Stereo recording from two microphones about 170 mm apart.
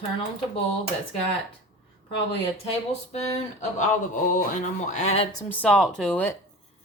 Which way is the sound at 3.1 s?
40° left (ahead or behind).